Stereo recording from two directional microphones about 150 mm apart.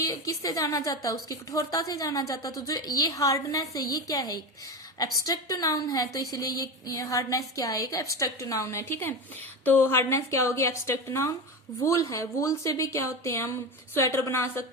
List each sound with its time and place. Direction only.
0.0 s a woman's voice: 25° left (ahead or behind)